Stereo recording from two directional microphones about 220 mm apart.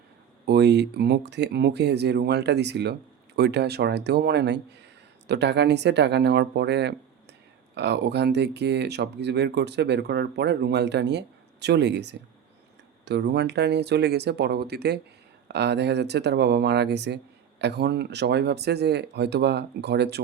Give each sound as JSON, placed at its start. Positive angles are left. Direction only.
{"t": 0.4, "sound": "speech", "side_deg": -50}